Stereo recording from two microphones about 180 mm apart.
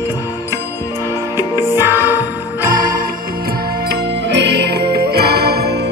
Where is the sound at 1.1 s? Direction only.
15° right (ahead or behind).